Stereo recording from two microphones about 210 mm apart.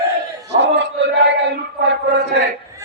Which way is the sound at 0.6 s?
55° right (ahead or behind).